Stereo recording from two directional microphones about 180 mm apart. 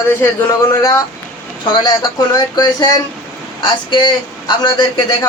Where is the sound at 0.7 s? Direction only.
15° left (ahead or behind).